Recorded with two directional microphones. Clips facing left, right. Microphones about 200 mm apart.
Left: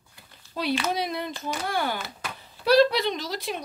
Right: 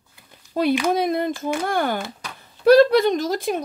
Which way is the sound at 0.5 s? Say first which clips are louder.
Right 7 dB; 50° right (ahead or behind).